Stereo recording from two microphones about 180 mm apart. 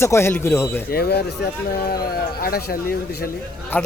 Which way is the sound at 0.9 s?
60° left (ahead or behind).